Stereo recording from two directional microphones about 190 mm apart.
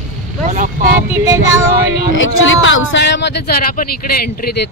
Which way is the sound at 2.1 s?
90° left.